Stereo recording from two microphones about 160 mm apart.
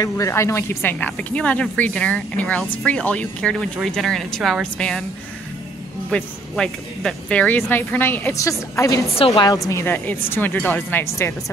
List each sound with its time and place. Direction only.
0.0 s speech: 20° left (ahead or behind)
6.0 s a woman's voice: 5° left (ahead or behind)